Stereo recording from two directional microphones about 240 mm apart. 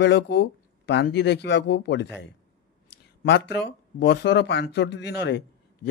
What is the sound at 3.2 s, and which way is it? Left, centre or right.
Speech, left.